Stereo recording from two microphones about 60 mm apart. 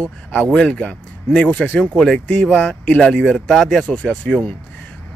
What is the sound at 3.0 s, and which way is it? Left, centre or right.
Speech, centre.